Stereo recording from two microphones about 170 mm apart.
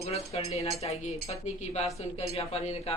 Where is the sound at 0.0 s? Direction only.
40° left (ahead or behind).